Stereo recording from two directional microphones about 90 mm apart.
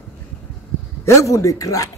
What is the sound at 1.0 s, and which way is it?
Speech, 35° left (ahead or behind).